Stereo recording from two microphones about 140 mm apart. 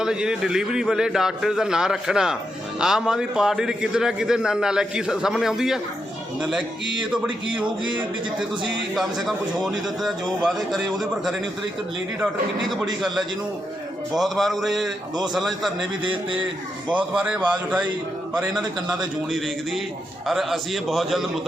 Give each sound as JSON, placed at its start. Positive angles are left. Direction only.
{"t": 0.0, "sound": "a man's voice", "side_deg": -5}
{"t": 7.3, "sound": "speech", "side_deg": -35}
{"t": 9.0, "sound": "a man's voice", "side_deg": 0}
{"t": 12.6, "sound": "a man's voice", "side_deg": 0}
{"t": 16.0, "sound": "speech", "side_deg": -35}
{"t": 16.9, "sound": "a man's voice", "side_deg": -10}
{"t": 18.9, "sound": "a man's voice", "side_deg": 0}